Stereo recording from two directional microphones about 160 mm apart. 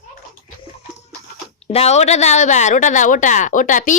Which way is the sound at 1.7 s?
40° left (ahead or behind).